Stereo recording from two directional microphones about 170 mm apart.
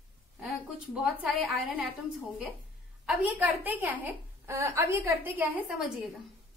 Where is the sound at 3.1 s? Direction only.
10° right (ahead or behind).